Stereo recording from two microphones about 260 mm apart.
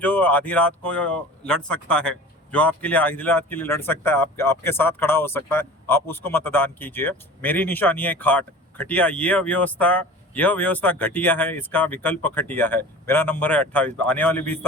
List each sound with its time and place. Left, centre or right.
0.0 s speech: centre